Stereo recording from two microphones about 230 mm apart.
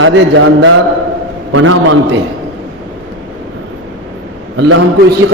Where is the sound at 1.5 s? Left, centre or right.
Right.